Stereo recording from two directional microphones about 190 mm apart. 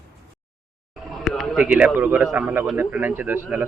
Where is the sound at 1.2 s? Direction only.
Centre (ahead or behind).